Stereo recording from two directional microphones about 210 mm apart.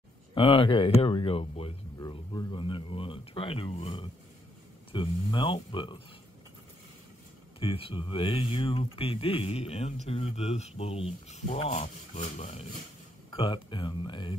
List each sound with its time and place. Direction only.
0.3 s speech: 25° left (ahead or behind)
7.6 s speech: 25° left (ahead or behind)